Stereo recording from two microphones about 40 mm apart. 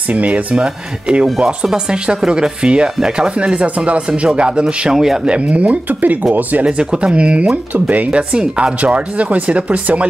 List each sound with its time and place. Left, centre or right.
0.1 s speech: right
1.2 s speech: centre
4.9 s speech: centre
5.2 s speech: right
6.6 s speech: right